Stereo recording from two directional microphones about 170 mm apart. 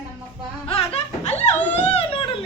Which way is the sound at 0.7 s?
35° left (ahead or behind).